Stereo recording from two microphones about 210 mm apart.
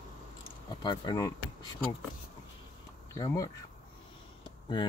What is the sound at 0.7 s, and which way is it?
Speech, 20° left (ahead or behind).